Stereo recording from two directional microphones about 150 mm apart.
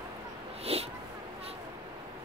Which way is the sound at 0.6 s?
45° right (ahead or behind).